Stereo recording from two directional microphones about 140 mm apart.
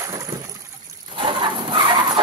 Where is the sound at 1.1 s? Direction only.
35° right (ahead or behind).